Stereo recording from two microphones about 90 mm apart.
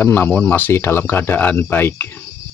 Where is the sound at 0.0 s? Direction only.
20° left (ahead or behind).